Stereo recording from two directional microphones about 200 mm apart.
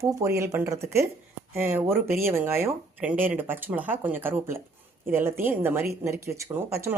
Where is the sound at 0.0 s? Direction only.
15° right (ahead or behind).